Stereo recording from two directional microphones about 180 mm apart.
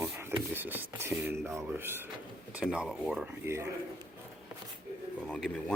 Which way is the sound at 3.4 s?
15° right (ahead or behind).